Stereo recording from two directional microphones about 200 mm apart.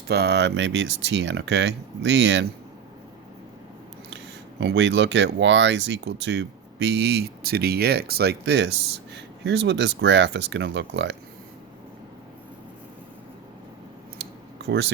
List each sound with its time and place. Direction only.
0.1 s speech: 55° right (ahead or behind)
4.6 s speech: 60° right (ahead or behind)
14.7 s speech: 60° right (ahead or behind)